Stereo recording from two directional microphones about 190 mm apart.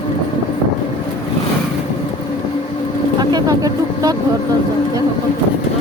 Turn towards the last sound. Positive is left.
turn(degrees=-20)  # may be behind; listen again after turning